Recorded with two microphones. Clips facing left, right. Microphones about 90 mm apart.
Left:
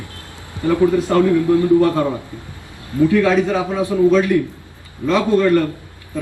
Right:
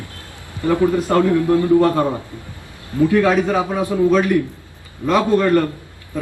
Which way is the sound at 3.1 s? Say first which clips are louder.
Even; 40° right (ahead or behind).